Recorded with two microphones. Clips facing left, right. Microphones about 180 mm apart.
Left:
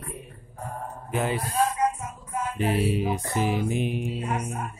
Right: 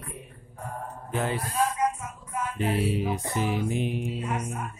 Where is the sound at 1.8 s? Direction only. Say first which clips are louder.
Left 2 dB; 30° left (ahead or behind).